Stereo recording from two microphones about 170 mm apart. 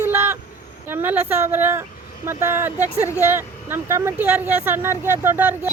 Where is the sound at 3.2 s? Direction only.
15° right (ahead or behind).